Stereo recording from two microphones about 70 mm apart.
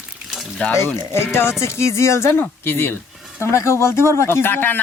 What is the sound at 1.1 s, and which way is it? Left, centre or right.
Speech, left.